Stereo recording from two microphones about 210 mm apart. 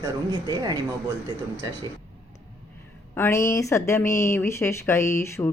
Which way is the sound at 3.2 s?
10° left (ahead or behind).